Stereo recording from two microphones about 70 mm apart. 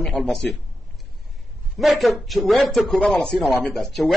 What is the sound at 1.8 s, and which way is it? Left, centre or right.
A man's voice, centre.